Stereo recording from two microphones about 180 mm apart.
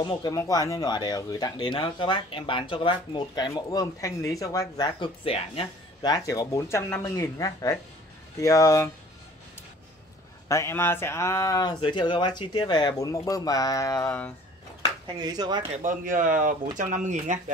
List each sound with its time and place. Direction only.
0.0 s speech: 20° left (ahead or behind)
6.1 s speech: 20° left (ahead or behind)
10.5 s speech: 15° left (ahead or behind)
15.1 s speech: 20° right (ahead or behind)
15.7 s speech: 45° right (ahead or behind)